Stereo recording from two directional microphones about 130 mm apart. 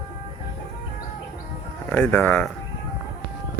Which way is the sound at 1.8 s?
10° left (ahead or behind).